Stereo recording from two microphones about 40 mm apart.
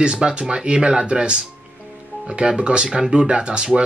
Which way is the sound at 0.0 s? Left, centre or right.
Right.